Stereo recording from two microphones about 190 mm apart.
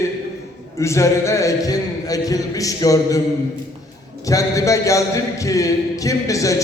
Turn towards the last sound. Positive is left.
turn(degrees=15)  # may be behind; listen again after turning